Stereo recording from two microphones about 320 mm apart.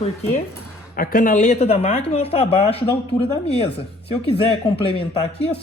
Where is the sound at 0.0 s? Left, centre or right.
Centre.